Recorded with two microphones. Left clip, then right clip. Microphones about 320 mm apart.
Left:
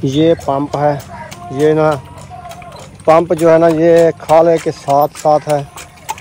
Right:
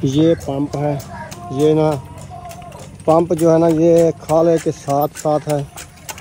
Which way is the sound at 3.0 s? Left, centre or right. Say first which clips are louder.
Left 4 dB; centre.